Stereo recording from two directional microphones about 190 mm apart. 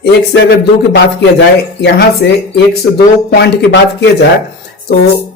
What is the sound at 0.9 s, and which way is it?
Speech, 65° left (ahead or behind).